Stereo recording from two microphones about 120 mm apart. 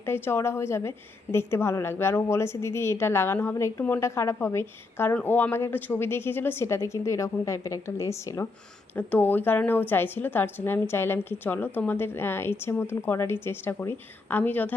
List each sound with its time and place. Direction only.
0.0 s a woman's voice: 20° left (ahead or behind)